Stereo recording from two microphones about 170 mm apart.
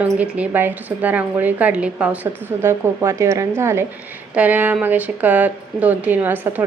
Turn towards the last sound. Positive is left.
turn(degrees=-10)  # may be behind; listen again after turning